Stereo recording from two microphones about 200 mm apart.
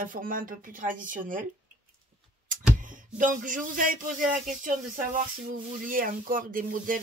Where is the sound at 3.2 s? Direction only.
40° right (ahead or behind).